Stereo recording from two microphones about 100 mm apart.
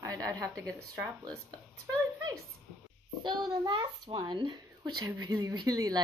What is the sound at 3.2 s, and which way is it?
Speech, 45° right (ahead or behind).